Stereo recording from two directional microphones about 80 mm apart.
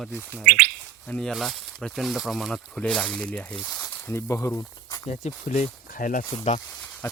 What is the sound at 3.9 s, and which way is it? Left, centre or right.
Speech, left.